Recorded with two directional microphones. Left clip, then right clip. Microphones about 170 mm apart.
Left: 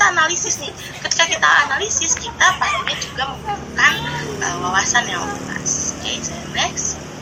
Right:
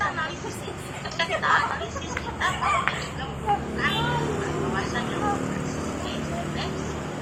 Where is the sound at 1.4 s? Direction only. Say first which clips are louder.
Left 8 dB; 55° left (ahead or behind).